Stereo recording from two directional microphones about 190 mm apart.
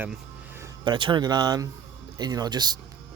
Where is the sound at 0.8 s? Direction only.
25° right (ahead or behind).